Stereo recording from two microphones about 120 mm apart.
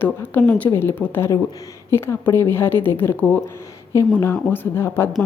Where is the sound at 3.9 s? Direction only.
25° left (ahead or behind).